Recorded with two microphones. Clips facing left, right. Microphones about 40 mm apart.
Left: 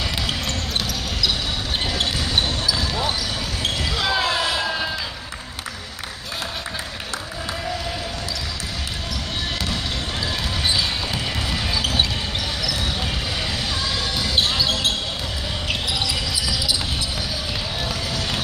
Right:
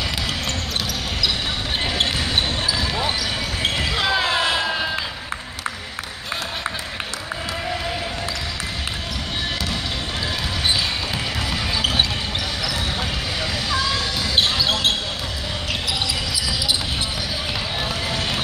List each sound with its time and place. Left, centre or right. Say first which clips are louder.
2.0 s basketball bounce: right 1 dB; right
4.6 s music: right 1 dB; centre
14.7 s basketball bounce: right 2 dB; right